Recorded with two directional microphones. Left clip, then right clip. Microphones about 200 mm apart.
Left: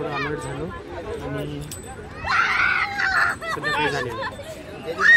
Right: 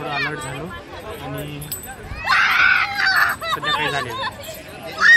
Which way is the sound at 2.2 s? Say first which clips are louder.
Right 5 dB; 40° left (ahead or behind).